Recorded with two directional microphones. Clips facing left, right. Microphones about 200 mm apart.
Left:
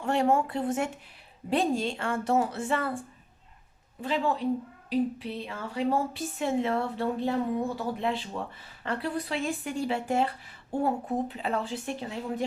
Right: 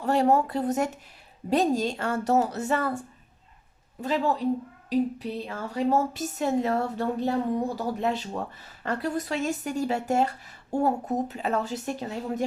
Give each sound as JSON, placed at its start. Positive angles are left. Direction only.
{"t": 0.0, "sound": "a woman's voice", "side_deg": -40}
{"t": 4.0, "sound": "a woman's voice", "side_deg": -40}